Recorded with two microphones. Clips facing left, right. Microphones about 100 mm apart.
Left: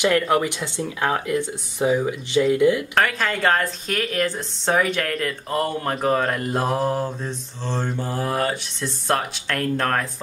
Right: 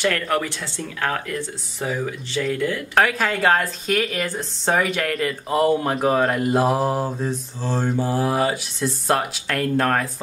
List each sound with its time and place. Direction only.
0.0 s speech: 15° left (ahead or behind)
2.9 s a woman's voice: 5° right (ahead or behind)